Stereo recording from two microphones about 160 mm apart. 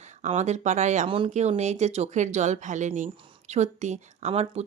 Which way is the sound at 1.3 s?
45° right (ahead or behind).